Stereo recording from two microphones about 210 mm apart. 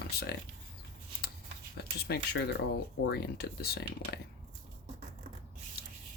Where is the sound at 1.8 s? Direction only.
50° left (ahead or behind).